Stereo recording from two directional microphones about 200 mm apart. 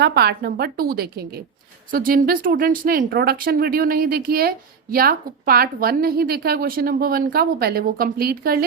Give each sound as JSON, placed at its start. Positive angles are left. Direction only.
{"t": 0.0, "sound": "a woman's voice", "side_deg": -55}